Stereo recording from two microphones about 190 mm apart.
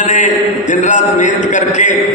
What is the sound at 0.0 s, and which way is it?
A man's voice, 40° left (ahead or behind).